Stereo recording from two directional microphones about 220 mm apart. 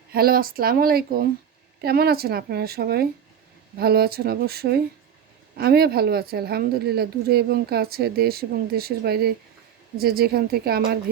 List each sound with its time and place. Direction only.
0.1 s a woman's voice: 45° right (ahead or behind)